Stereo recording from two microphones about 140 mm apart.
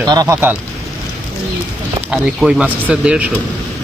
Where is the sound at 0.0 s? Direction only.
30° right (ahead or behind).